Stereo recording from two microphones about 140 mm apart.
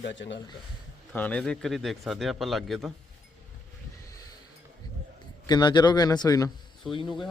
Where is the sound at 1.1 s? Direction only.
10° left (ahead or behind).